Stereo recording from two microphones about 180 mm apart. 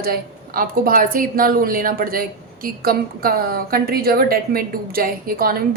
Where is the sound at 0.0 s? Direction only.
55° right (ahead or behind).